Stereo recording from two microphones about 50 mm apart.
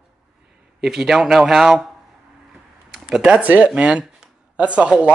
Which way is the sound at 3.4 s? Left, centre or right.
Right.